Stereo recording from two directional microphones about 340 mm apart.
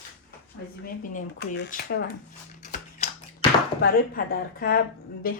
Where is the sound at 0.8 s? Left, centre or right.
Left.